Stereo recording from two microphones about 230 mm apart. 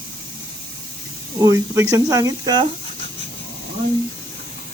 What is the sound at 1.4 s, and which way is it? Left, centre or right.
Speech, centre.